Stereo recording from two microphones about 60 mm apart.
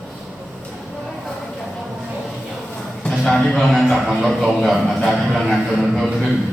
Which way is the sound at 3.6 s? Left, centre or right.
Centre.